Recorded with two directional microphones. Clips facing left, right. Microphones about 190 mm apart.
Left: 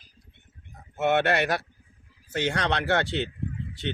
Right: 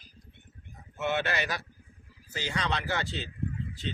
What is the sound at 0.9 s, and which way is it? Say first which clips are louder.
Speech: left 7 dB; 60° left (ahead or behind).